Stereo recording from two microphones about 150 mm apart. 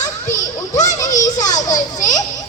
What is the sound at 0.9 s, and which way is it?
Children playing, 20° left (ahead or behind).